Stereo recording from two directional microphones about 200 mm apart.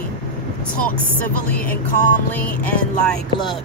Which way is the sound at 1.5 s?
10° left (ahead or behind).